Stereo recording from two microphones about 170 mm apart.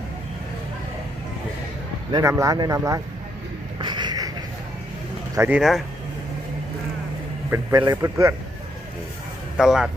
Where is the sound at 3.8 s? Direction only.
25° right (ahead or behind).